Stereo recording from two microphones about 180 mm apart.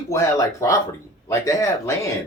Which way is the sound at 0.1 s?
15° left (ahead or behind).